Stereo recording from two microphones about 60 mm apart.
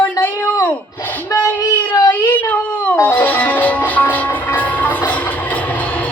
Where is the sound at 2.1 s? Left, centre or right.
Left.